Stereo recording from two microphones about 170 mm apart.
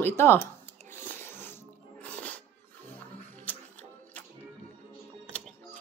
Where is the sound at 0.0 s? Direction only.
15° left (ahead or behind).